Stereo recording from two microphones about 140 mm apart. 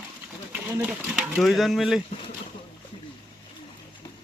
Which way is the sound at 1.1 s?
Centre (ahead or behind).